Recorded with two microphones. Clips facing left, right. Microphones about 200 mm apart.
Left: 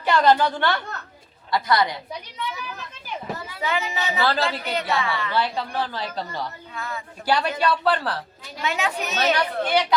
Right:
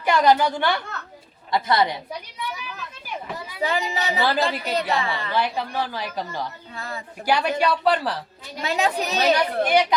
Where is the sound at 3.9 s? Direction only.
35° right (ahead or behind).